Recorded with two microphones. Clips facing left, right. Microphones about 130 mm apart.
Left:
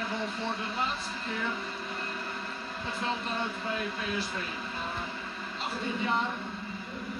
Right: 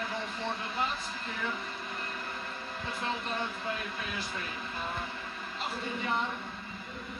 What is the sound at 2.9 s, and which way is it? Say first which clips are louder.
Speech: left 2 dB; centre (ahead or behind).